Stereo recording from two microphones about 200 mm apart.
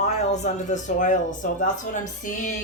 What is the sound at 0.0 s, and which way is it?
Speech, 35° left (ahead or behind).